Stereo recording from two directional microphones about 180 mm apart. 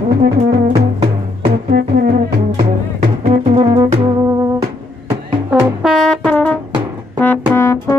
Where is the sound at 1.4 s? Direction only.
60° right (ahead or behind).